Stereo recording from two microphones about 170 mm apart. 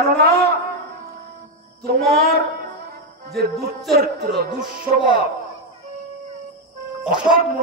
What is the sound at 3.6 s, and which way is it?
Speech, 70° right (ahead or behind).